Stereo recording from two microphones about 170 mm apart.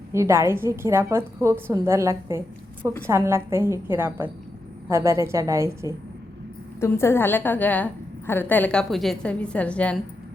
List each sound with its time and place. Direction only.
0.1 s a woman's voice: 15° right (ahead or behind)
6.7 s a woman's voice: 15° left (ahead or behind)